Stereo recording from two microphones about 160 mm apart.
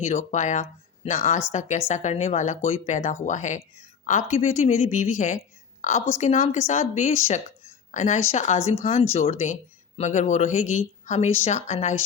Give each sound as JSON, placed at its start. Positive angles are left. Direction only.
{"t": 0.0, "sound": "speech", "side_deg": 50}